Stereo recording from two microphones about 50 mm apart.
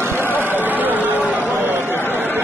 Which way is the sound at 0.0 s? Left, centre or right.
Right.